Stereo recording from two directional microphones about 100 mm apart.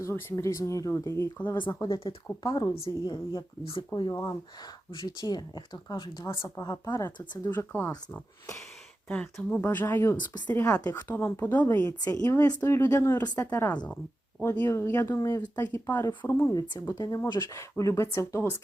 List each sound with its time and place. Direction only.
0.0 s speech: 20° left (ahead or behind)
2.0 s speech: 45° left (ahead or behind)
6.4 s speech: 35° left (ahead or behind)
7.4 s speech: 20° left (ahead or behind)
9.0 s speech: 10° left (ahead or behind)
9.6 s speech: 20° left (ahead or behind)
11.9 s speech: 35° left (ahead or behind)
16.5 s speech: 40° left (ahead or behind)